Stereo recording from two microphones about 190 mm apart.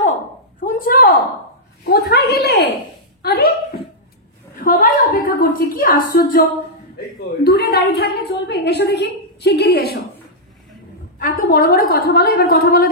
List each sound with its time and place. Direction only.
0.7 s a sound: 50° left (ahead or behind)
1.9 s a woman's voice: 55° left (ahead or behind)
7.4 s a woman's voice: 55° left (ahead or behind)
11.1 s a woman's voice: 50° left (ahead or behind)